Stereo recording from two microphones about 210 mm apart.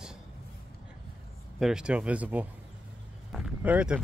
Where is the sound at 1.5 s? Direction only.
5° right (ahead or behind).